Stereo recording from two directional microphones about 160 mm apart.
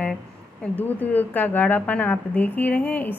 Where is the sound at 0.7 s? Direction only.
10° left (ahead or behind).